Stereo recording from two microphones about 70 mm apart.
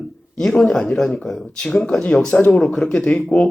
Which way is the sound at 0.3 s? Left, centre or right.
Centre.